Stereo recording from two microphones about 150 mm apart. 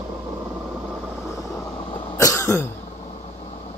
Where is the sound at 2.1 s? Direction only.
20° left (ahead or behind).